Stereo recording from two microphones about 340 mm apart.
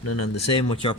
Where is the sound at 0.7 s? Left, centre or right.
Centre.